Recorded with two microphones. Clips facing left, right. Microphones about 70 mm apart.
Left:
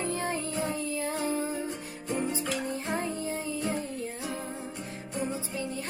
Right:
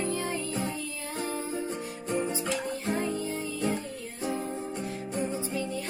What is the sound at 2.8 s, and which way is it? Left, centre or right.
Music, left.